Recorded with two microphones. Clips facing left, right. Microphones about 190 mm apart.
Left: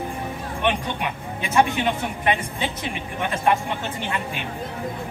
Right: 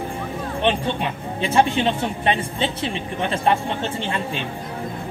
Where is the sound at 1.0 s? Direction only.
30° right (ahead or behind).